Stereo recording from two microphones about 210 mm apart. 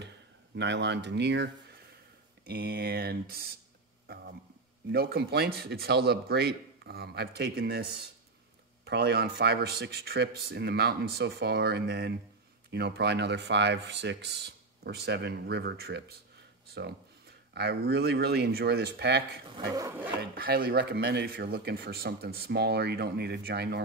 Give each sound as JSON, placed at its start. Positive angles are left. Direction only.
{"t": 0.6, "sound": "speech", "side_deg": -55}
{"t": 4.1, "sound": "a sound", "side_deg": -50}
{"t": 4.9, "sound": "speech", "side_deg": -50}
{"t": 8.8, "sound": "speech", "side_deg": -50}
{"t": 17.6, "sound": "speech", "side_deg": -50}
{"t": 19.5, "sound": "speech", "side_deg": -15}
{"t": 20.2, "sound": "speech", "side_deg": -45}